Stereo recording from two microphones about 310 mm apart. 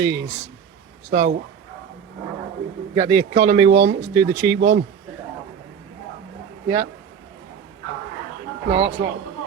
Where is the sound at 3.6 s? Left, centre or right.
Right.